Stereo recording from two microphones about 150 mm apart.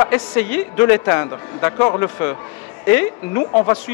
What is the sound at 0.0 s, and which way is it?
A man's voice, 10° left (ahead or behind).